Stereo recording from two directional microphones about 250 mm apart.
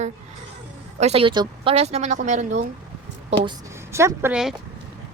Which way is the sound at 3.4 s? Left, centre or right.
Centre.